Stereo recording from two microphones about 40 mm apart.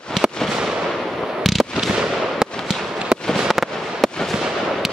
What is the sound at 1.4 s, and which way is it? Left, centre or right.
Fireworks, centre.